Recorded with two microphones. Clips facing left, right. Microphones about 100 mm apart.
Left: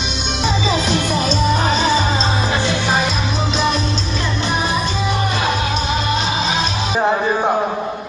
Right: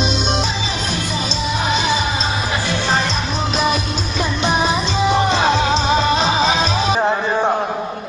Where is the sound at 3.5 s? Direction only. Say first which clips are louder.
Even; 5° right (ahead or behind); by 6.9 s 35° right (ahead or behind).